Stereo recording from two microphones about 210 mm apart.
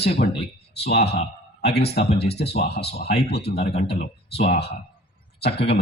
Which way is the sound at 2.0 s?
30° left (ahead or behind).